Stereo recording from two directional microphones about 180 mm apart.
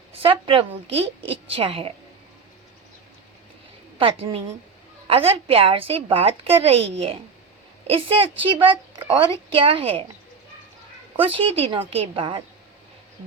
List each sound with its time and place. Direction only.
0.1 s a woman's voice: 30° right (ahead or behind)
3.9 s a woman's voice: 30° right (ahead or behind)
11.2 s speech: 30° right (ahead or behind)